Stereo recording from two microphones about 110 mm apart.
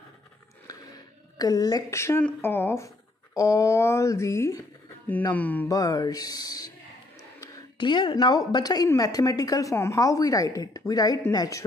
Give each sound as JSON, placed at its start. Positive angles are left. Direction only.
{"t": 0.7, "sound": "a sound", "side_deg": 35}
{"t": 2.4, "sound": "speech", "side_deg": 20}
{"t": 5.0, "sound": "speech", "side_deg": 15}
{"t": 5.7, "sound": "a woman's voice", "side_deg": 30}
{"t": 7.7, "sound": "a woman's voice", "side_deg": 45}